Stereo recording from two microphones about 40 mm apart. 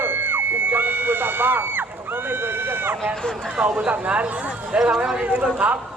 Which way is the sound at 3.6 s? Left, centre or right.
Right.